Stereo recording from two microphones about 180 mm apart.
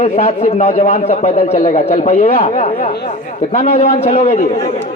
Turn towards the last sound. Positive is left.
turn(degrees=35)  # may be behind; listen again after turning